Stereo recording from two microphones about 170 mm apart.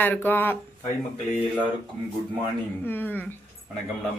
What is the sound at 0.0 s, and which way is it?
Speech, 10° left (ahead or behind).